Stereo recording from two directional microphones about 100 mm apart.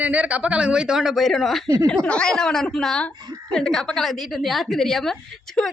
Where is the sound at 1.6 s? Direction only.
35° right (ahead or behind).